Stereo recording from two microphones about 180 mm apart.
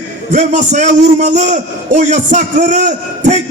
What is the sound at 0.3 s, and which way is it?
A man's voice, 40° right (ahead or behind).